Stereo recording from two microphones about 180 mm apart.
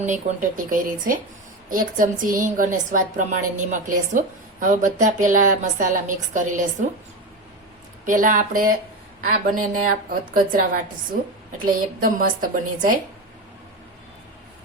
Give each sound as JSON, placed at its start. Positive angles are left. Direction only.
{"t": 0.0, "sound": "a woman's voice", "side_deg": -45}
{"t": 8.0, "sound": "a woman's voice", "side_deg": -45}